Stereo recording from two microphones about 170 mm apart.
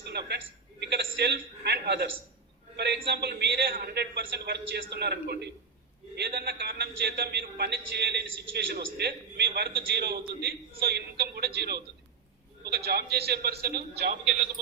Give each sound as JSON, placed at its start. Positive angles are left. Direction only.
{"t": 0.0, "sound": "a man's voice", "side_deg": -80}
{"t": 9.6, "sound": "a man's voice", "side_deg": -65}